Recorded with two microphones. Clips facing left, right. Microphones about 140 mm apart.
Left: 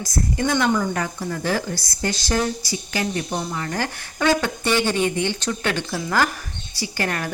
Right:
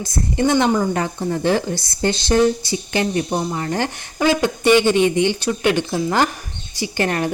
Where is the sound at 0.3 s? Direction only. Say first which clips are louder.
Right 5 dB; 25° right (ahead or behind).